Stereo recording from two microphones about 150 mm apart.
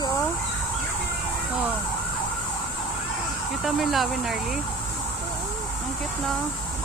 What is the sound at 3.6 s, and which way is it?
Speech, centre (ahead or behind).